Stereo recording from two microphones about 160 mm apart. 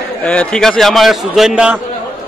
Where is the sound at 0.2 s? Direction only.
5° left (ahead or behind).